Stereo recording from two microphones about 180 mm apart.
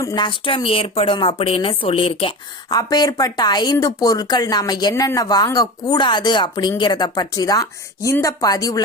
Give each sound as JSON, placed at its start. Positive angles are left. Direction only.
{"t": 0.0, "sound": "a woman's voice", "side_deg": 20}
{"t": 2.6, "sound": "a woman's voice", "side_deg": 20}